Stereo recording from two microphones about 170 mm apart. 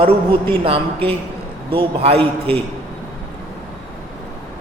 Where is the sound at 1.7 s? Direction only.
35° right (ahead or behind).